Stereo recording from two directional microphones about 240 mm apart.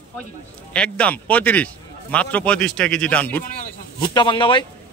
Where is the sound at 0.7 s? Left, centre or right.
Centre.